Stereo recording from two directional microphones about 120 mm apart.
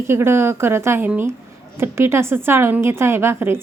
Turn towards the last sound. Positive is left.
turn(degrees=-20)  # may be behind; listen again after turning